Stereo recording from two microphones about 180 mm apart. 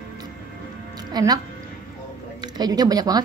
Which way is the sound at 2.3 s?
25° right (ahead or behind).